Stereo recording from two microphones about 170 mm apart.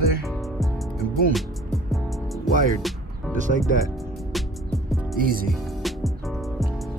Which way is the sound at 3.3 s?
45° right (ahead or behind).